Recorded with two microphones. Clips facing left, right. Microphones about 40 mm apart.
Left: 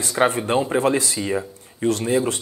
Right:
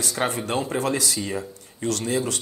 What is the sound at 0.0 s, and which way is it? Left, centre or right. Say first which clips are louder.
Speech: left 6 dB; left.